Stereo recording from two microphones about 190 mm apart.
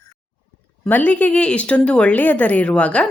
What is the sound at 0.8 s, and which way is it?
Speech, 10° left (ahead or behind).